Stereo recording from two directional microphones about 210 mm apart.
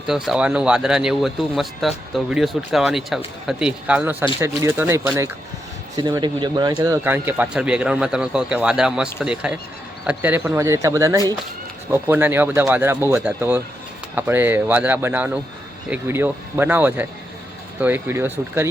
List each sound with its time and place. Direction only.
0.1 s speech: 5° right (ahead or behind)